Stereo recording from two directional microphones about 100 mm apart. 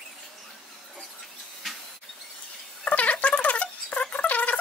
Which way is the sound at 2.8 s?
15° left (ahead or behind).